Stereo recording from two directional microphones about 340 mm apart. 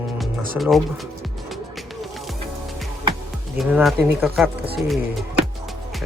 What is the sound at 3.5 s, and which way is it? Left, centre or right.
Speech, centre.